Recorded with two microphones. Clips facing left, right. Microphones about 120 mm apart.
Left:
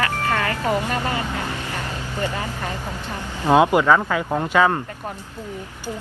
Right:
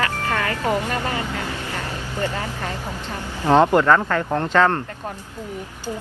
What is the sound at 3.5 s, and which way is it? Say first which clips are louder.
Speech: even; 10° left (ahead or behind).